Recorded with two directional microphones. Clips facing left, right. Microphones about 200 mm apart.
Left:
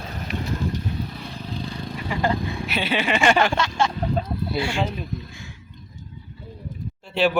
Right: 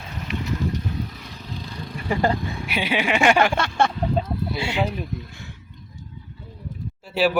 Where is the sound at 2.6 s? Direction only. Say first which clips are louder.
Right 1 dB; 10° right (ahead or behind).